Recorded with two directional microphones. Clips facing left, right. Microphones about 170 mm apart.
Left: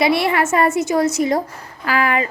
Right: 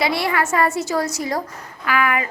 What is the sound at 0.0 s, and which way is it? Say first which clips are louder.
A woman's voice: left 4 dB; 25° left (ahead or behind).